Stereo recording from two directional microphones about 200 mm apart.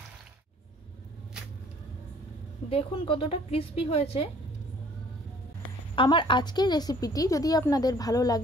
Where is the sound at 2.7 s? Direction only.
30° left (ahead or behind).